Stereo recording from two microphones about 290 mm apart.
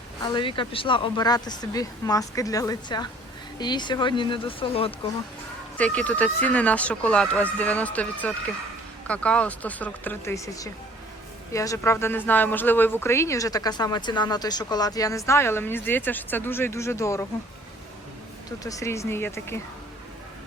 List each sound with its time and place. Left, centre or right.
0.2 s a woman's voice: centre
5.7 s a woman's voice: centre
18.6 s a woman's voice: centre